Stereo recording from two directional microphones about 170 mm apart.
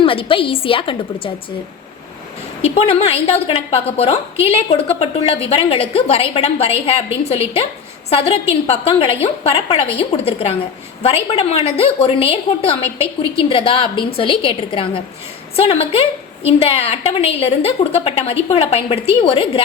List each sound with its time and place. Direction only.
0.0 s a woman's voice: 30° left (ahead or behind)
2.6 s a woman's voice: 35° left (ahead or behind)